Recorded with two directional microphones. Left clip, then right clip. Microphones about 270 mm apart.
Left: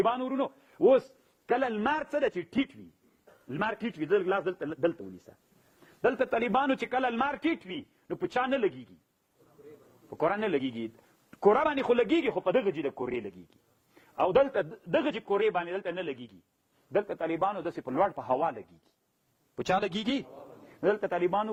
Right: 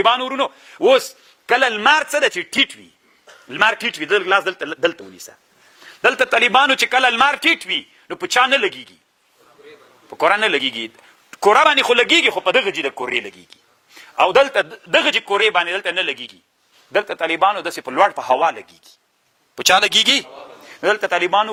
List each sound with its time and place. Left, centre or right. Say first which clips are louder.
0.0 s a man's voice: right 12 dB; centre
10.2 s a man's voice: right 13 dB; centre
14.3 s a man's voice: right 11 dB; centre
19.5 s a man's voice: right 16 dB; centre
20.3 s a sound: right 11 dB; right
20.7 s a man's voice: right 11 dB; centre